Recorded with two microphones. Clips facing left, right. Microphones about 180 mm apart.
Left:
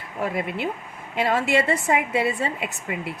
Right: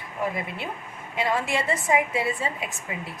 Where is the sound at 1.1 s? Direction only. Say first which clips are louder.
Left 4 dB; 65° left (ahead or behind).